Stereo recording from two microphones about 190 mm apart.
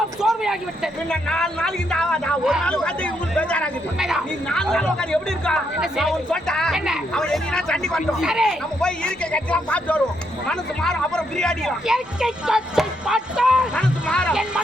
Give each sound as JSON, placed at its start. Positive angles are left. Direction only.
{"t": 0.2, "sound": "a sound", "side_deg": -5}
{"t": 1.1, "sound": "speech", "side_deg": 5}
{"t": 13.7, "sound": "speech", "side_deg": 10}